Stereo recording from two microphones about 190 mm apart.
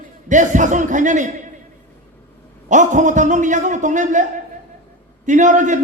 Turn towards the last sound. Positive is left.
turn(degrees=-40)  # may be behind; listen again after turning